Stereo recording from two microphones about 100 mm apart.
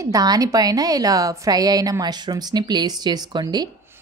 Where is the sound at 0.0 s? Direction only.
40° right (ahead or behind).